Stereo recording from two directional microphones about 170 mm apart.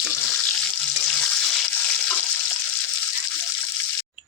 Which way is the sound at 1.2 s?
Centre (ahead or behind).